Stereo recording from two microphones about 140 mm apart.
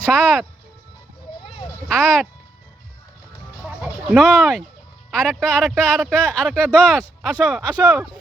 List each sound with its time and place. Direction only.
0.0 s speech: 5° left (ahead or behind)
1.9 s speech: 5° left (ahead or behind)
3.6 s a sound: centre (ahead or behind)
5.2 s speech: centre (ahead or behind)